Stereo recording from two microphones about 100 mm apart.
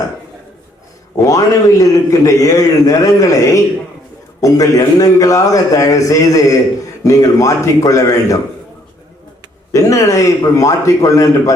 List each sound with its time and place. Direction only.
1.2 s a man's voice: 35° left (ahead or behind)
9.7 s a man's voice: 35° left (ahead or behind)